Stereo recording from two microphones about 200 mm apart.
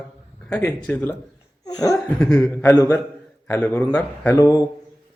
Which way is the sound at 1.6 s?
20° left (ahead or behind).